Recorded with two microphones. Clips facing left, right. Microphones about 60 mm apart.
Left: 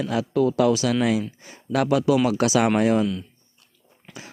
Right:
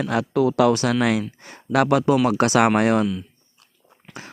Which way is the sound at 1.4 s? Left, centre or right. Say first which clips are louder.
Right 4 dB; right.